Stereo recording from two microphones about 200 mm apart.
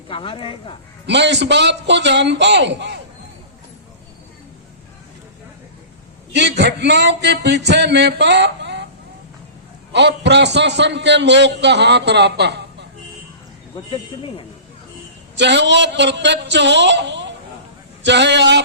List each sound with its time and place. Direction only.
0.1 s speech: 25° left (ahead or behind)
1.0 s a man's voice: 60° right (ahead or behind)
6.3 s a man's voice: 60° right (ahead or behind)
9.9 s a man's voice: 60° right (ahead or behind)
13.9 s speech: 25° left (ahead or behind)
15.4 s a man's voice: 60° right (ahead or behind)